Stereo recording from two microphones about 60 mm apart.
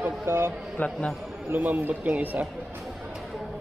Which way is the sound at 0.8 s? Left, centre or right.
Left.